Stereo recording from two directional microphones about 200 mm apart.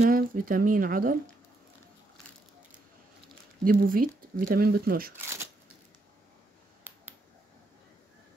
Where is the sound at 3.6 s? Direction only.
45° right (ahead or behind).